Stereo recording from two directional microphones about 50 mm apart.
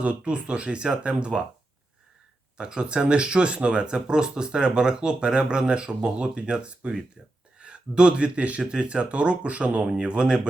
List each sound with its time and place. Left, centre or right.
0.0 s speech: right
2.6 s speech: centre